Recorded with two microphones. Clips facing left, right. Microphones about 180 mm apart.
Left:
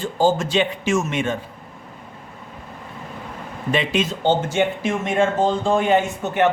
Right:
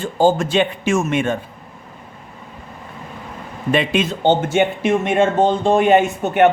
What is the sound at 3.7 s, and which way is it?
Speech, 55° right (ahead or behind).